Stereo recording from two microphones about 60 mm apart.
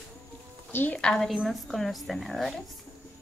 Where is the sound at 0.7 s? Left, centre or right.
Left.